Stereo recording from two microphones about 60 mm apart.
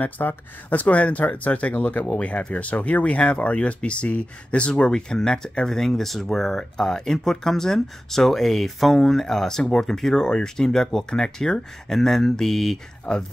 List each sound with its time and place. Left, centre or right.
0.0 s speech: left; by 12.7 s centre